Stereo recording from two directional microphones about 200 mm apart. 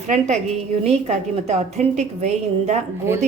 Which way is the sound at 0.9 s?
35° right (ahead or behind).